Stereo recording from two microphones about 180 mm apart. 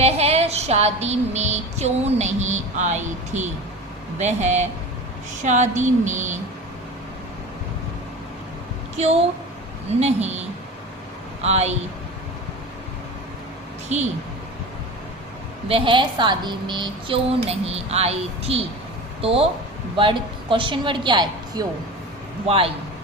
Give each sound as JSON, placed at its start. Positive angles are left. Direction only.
{"t": 0.0, "sound": "a woman's voice", "side_deg": -35}
{"t": 10.0, "sound": "speech", "side_deg": -35}
{"t": 11.4, "sound": "speech", "side_deg": -35}
{"t": 13.8, "sound": "speech", "side_deg": -40}
{"t": 15.6, "sound": "a woman's voice", "side_deg": -30}